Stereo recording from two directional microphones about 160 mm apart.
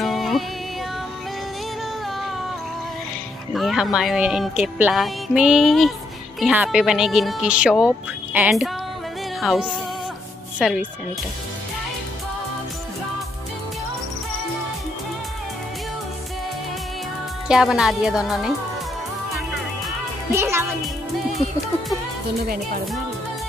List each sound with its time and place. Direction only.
0.0 s music: centre (ahead or behind)
3.5 s speech: centre (ahead or behind)
17.5 s speech: 5° right (ahead or behind)
20.2 s music: 15° right (ahead or behind)